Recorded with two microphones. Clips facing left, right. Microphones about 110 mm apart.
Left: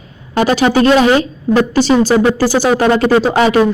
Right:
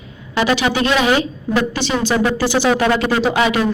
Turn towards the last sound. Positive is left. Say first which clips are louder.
# left 5 dB
turn(degrees=35)  # may be behind; listen again after turning